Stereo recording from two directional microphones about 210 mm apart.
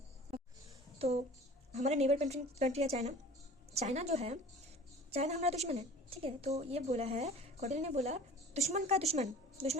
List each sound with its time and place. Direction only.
0.9 s a woman's voice: 30° right (ahead or behind)